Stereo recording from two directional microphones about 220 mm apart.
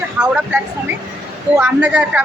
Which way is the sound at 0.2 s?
5° right (ahead or behind).